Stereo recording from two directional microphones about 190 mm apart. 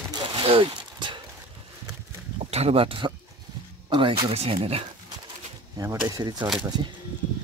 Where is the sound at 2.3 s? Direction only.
35° right (ahead or behind).